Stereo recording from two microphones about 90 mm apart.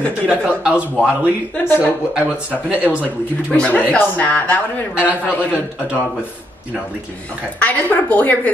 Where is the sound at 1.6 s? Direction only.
25° left (ahead or behind).